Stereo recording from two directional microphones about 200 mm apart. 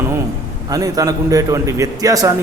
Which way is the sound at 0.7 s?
20° right (ahead or behind).